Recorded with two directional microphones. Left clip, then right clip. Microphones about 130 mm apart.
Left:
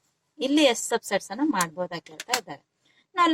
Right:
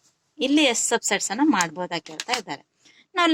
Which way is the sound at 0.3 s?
30° right (ahead or behind).